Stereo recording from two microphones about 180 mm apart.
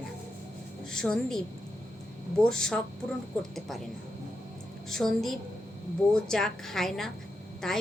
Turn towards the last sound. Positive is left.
turn(degrees=5)  # may be behind; listen again after turning